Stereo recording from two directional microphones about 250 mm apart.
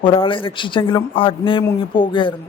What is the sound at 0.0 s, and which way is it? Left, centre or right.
A man's voice, left.